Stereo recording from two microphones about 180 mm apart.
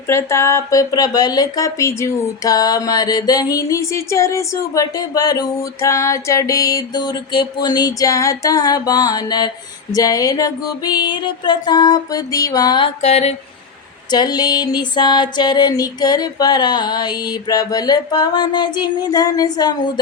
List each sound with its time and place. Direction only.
0.1 s speech: 15° left (ahead or behind)
13.0 s a sound: 40° left (ahead or behind)
14.1 s speech: 25° left (ahead or behind)